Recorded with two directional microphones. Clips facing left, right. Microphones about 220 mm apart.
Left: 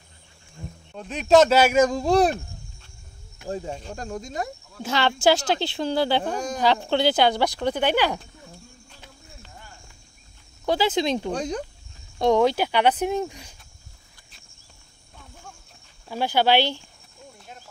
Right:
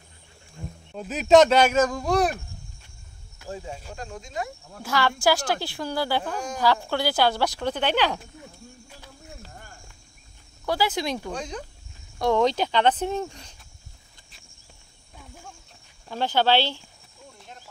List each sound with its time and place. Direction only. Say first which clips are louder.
0.9 s speech: right 1 dB; 5° right (ahead or behind)
1.9 s speech: left 4 dB; 25° left (ahead or behind)
3.4 s speech: left 5 dB; 40° left (ahead or behind)
4.8 s speech: left 2 dB; 25° left (ahead or behind)
9.4 s snake: right 2 dB; 45° right (ahead or behind)
10.6 s speech: left 4 dB; 20° left (ahead or behind)
16.1 s speech: left 1 dB; 10° left (ahead or behind)